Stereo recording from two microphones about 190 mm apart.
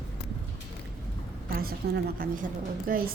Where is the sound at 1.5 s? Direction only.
50° right (ahead or behind).